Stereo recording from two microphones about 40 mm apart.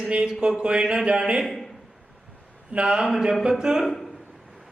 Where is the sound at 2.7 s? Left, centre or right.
Right.